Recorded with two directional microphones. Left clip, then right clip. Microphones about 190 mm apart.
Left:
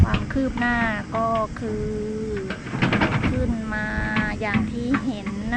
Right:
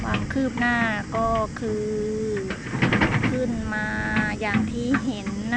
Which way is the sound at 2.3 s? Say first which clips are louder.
Right 1 dB; 45° left (ahead or behind).